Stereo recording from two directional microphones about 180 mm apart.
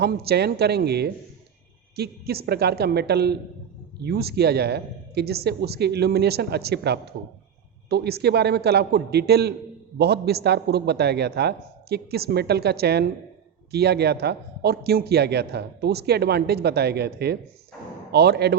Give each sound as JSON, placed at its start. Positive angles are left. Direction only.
{"t": 0.0, "sound": "a man's voice", "side_deg": -60}